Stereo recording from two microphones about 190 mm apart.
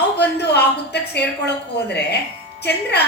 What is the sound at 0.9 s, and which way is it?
A woman's voice, 60° left (ahead or behind).